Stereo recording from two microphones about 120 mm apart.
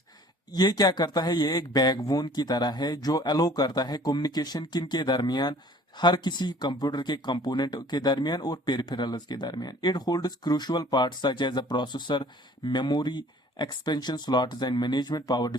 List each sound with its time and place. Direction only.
0.5 s speech: 35° left (ahead or behind)